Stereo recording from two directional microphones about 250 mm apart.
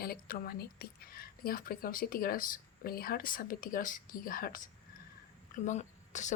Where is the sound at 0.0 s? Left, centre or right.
Left.